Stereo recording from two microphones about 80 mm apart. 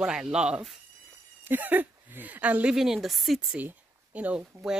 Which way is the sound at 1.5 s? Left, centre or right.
Right.